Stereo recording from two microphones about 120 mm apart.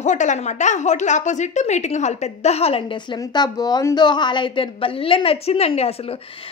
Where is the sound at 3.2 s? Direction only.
35° left (ahead or behind).